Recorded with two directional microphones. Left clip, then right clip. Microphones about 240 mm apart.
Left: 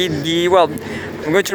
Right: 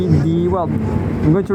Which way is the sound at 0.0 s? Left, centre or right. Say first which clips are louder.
Left 1 dB; left.